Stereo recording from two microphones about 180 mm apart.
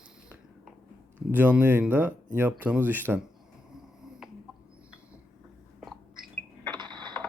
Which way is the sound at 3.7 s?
5° right (ahead or behind).